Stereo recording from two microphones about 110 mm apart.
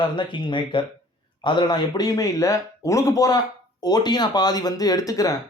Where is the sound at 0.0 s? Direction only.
45° left (ahead or behind).